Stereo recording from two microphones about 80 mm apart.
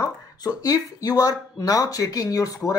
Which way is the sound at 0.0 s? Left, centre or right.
Left.